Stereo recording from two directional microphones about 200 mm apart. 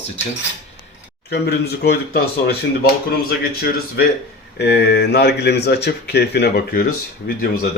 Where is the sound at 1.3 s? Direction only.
55° left (ahead or behind).